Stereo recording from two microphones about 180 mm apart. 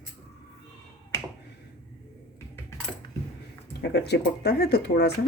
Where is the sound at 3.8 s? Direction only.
65° left (ahead or behind).